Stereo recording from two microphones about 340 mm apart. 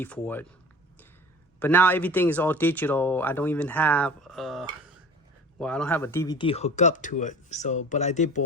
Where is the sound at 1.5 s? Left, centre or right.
Centre.